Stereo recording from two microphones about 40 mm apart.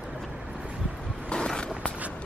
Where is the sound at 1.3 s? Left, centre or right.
Left.